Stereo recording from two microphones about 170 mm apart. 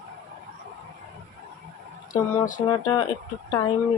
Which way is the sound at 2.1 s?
50° left (ahead or behind).